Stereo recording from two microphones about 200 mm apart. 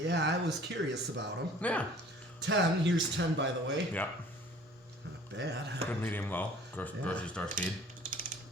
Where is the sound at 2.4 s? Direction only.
65° right (ahead or behind).